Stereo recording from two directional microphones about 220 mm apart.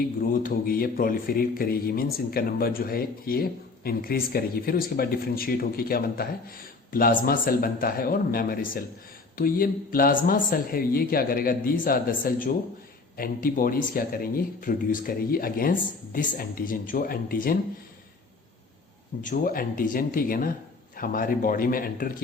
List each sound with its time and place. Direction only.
0.3 s speech: 40° left (ahead or behind)
19.2 s speech: 40° left (ahead or behind)